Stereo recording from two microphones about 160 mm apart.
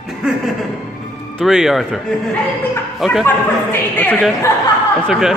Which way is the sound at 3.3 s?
10° left (ahead or behind).